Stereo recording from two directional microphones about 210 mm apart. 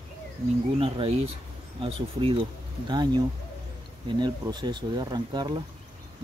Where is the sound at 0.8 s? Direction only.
25° right (ahead or behind).